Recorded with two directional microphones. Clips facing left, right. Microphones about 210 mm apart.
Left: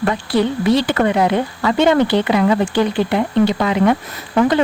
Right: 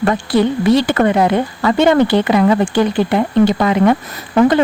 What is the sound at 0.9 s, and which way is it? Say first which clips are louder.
Speech: right 2 dB; 50° right (ahead or behind).